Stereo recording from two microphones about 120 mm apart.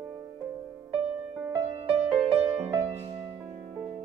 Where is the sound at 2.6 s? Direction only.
50° right (ahead or behind).